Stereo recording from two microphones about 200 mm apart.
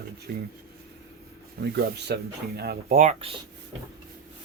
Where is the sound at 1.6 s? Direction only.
50° right (ahead or behind).